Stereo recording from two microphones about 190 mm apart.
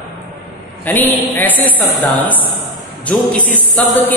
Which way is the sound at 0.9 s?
10° left (ahead or behind).